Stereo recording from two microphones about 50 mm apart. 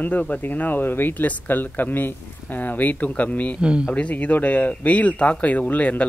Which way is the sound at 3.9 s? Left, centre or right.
Left.